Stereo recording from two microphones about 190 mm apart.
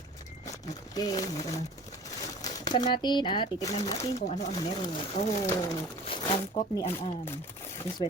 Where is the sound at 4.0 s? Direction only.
35° left (ahead or behind).